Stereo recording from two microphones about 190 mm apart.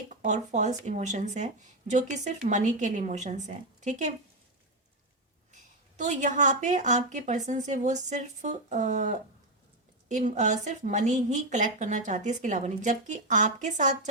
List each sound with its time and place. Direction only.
0.1 s a woman's voice: 40° right (ahead or behind)
6.0 s a woman's voice: 40° right (ahead or behind)